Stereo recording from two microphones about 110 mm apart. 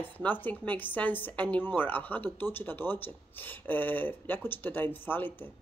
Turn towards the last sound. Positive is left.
turn(degrees=15)  # may be behind; listen again after turning